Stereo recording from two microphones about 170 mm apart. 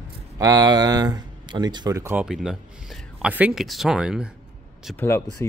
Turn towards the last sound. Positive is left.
turn(degrees=15)  # may be behind; listen again after turning